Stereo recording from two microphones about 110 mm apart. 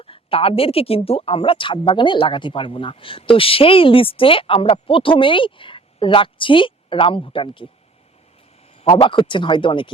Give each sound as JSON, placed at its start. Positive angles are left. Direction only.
{"t": 0.0, "sound": "speech", "side_deg": 60}
{"t": 8.9, "sound": "speech", "side_deg": 50}